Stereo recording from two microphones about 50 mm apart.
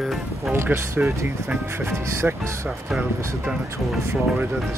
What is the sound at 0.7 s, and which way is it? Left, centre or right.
Speech, right.